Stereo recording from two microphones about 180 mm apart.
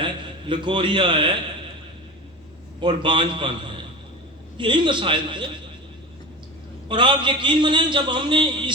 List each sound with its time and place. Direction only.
0.0 s a man's voice: 25° right (ahead or behind)
2.8 s a man's voice: 25° right (ahead or behind)
6.8 s a man's voice: 25° right (ahead or behind)